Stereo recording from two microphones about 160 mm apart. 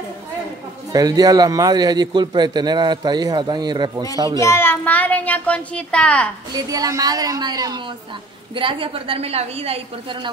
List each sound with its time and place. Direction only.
0.9 s a man's voice: 25° right (ahead or behind)
4.4 s a child's voice: 15° left (ahead or behind)
6.5 s a man's voice: 20° right (ahead or behind); by 9.8 s 40° right (ahead or behind)